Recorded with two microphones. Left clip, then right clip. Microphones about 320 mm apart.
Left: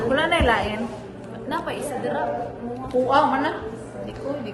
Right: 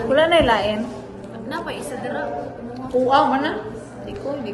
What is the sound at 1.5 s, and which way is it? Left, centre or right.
Speech, centre.